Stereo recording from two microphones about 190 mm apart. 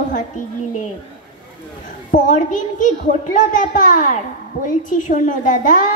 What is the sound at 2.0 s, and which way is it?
A woman's voice, 40° left (ahead or behind).